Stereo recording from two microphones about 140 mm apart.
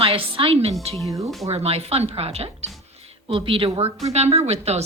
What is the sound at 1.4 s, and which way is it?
A woman's voice, 45° right (ahead or behind).